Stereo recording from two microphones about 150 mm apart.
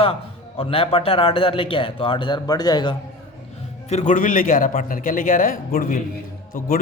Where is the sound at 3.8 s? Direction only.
50° left (ahead or behind).